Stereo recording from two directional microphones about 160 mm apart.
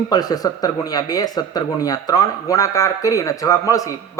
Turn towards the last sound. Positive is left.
turn(degrees=20)  # may be behind; listen again after turning